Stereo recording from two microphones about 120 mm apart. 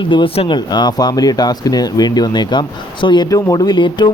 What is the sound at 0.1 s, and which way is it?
Speech, 40° left (ahead or behind).